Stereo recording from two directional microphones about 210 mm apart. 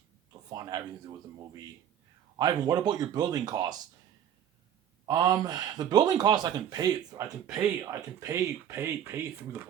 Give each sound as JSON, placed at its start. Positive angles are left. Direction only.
{"t": 0.5, "sound": "speech", "side_deg": -20}
{"t": 2.4, "sound": "speech", "side_deg": -20}
{"t": 5.0, "sound": "speech", "side_deg": -15}